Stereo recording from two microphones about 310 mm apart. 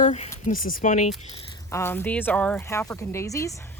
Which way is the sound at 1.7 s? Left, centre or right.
Centre.